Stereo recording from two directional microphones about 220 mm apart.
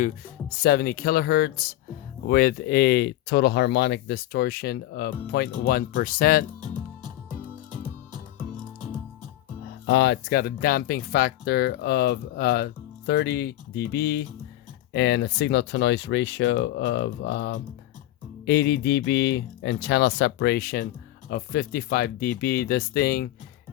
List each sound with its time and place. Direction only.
0.5 s speech: 45° left (ahead or behind)
6.6 s music: 20° right (ahead or behind)
9.8 s speech: 55° left (ahead or behind)